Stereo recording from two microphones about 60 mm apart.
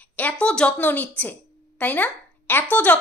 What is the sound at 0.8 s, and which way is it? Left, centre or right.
Speech, left.